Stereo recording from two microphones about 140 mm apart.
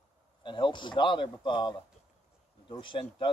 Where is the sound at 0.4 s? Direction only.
35° left (ahead or behind).